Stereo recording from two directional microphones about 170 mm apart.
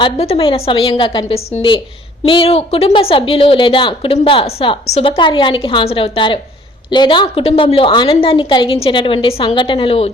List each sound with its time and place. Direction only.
0.0 s speech: 35° left (ahead or behind)